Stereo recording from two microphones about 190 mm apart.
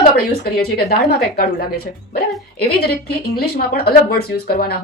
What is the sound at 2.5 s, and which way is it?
Speech, 55° left (ahead or behind).